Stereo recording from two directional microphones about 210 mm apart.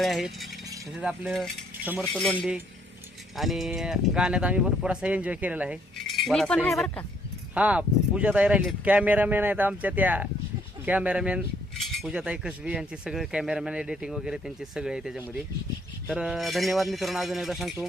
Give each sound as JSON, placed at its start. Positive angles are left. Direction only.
{"t": 0.0, "sound": "cutlery", "side_deg": 0}
{"t": 7.5, "sound": "speech", "side_deg": -5}
{"t": 10.8, "sound": "cutlery", "side_deg": -5}